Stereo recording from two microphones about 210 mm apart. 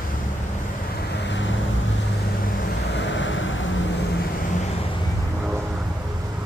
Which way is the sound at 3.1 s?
65° left (ahead or behind).